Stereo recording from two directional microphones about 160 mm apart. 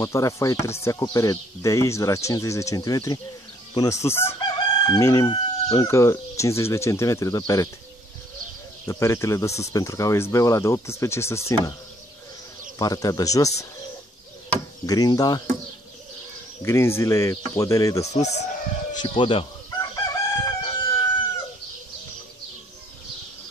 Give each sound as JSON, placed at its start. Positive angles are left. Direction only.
{"t": 0.0, "sound": "speech", "side_deg": 20}
{"t": 4.4, "sound": "chicken", "side_deg": 25}
{"t": 8.8, "sound": "speech", "side_deg": 15}
{"t": 12.7, "sound": "speech", "side_deg": 25}
{"t": 14.9, "sound": "speech", "side_deg": 25}
{"t": 16.6, "sound": "speech", "side_deg": 15}
{"t": 18.1, "sound": "speech", "side_deg": 45}
{"t": 18.9, "sound": "speech", "side_deg": 30}
{"t": 19.8, "sound": "chicken", "side_deg": 20}